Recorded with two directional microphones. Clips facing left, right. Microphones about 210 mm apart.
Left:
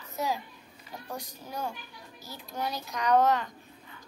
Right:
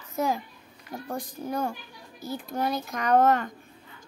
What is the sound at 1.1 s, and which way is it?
Child singing, 55° right (ahead or behind).